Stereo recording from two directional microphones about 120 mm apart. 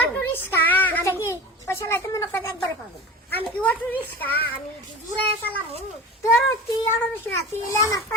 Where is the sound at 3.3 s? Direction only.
15° left (ahead or behind).